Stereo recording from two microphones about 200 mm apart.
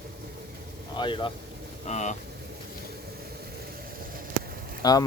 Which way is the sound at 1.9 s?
35° left (ahead or behind).